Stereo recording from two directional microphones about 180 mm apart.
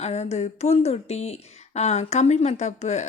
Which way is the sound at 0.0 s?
40° left (ahead or behind).